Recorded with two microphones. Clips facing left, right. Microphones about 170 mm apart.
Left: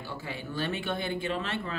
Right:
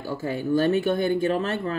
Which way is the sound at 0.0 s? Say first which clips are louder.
Right 10 dB; 45° right (ahead or behind).